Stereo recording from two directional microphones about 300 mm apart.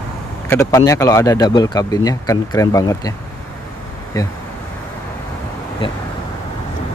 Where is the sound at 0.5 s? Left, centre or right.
Centre.